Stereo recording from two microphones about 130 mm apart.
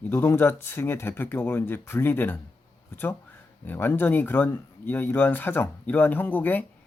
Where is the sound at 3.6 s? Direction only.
15° left (ahead or behind).